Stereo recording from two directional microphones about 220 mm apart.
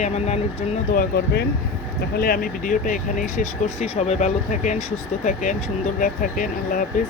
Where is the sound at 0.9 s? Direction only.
45° left (ahead or behind).